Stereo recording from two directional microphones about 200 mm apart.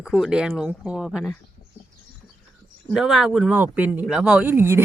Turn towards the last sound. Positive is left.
turn(degrees=-10)  # may be behind; listen again after turning